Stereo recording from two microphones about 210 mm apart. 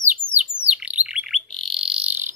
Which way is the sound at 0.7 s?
5° right (ahead or behind).